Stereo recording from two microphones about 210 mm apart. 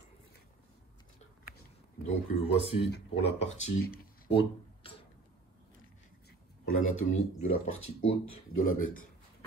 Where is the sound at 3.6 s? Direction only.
50° left (ahead or behind).